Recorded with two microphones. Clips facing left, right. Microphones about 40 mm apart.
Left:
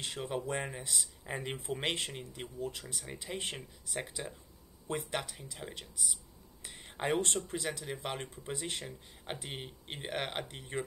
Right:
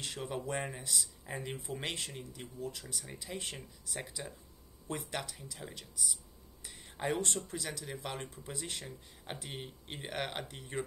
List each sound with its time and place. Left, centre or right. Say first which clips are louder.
0.0 s speech: left 2 dB; centre
6.6 s whispering: left 1 dB; left
7.4 s speech: left 4 dB; left